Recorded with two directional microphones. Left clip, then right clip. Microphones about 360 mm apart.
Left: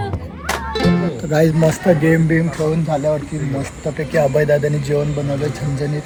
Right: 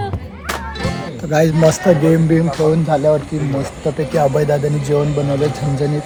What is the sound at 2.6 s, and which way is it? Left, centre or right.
Speech, centre.